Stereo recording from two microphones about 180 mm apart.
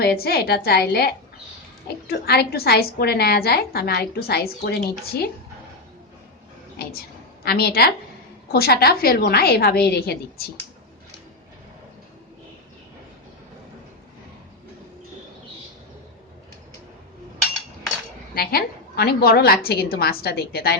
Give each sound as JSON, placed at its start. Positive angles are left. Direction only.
{"t": 0.0, "sound": "a woman's voice", "side_deg": 60}
{"t": 6.8, "sound": "a sound", "side_deg": 60}
{"t": 7.4, "sound": "a woman's voice", "side_deg": 60}
{"t": 18.3, "sound": "a woman's voice", "side_deg": 60}